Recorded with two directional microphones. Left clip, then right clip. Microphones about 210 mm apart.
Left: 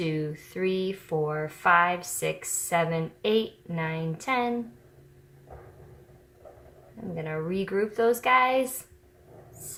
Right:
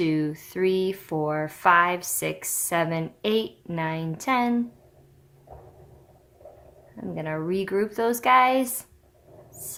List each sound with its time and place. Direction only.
0.0 s speech: 45° right (ahead or behind)
7.2 s speech: 45° right (ahead or behind)